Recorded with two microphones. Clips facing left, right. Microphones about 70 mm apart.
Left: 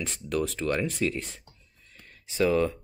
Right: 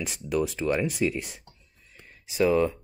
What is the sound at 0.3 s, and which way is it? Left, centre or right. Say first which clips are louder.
Speech: right 2 dB; centre.